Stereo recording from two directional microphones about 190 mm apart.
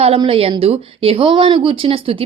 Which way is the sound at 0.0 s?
30° right (ahead or behind).